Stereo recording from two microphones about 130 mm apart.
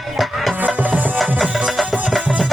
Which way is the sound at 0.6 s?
10° right (ahead or behind).